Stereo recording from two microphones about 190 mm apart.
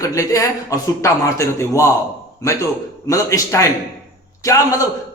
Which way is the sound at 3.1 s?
15° left (ahead or behind).